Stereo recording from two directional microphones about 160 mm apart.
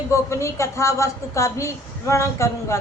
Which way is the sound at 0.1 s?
15° left (ahead or behind).